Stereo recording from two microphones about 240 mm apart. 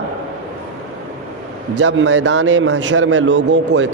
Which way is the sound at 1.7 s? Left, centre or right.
Right.